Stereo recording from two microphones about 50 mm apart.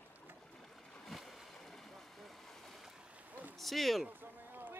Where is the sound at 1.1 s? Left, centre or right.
Centre.